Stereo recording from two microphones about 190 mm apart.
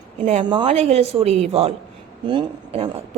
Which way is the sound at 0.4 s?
25° right (ahead or behind).